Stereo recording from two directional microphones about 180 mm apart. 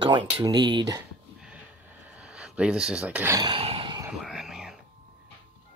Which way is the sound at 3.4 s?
30° right (ahead or behind).